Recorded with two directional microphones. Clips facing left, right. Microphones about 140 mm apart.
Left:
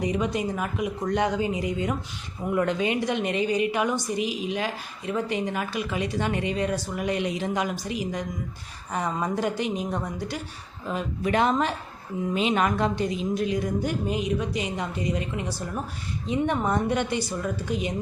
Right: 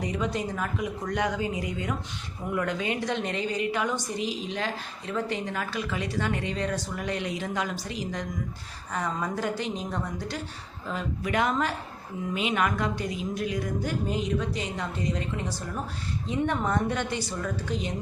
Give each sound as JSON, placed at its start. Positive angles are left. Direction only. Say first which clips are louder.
{"t": 0.0, "sound": "a woman's voice", "louder": "left 3 dB", "side_deg": 15}
{"t": 1.0, "sound": "a woman's voice", "louder": "left 4 dB", "side_deg": 25}
{"t": 11.3, "sound": "a woman's voice", "louder": "left 4 dB", "side_deg": 30}